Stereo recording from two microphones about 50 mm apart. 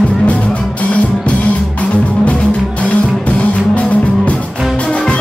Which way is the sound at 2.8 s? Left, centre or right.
Left.